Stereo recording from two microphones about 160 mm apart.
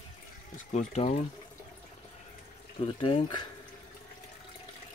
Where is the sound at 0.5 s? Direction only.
50° left (ahead or behind).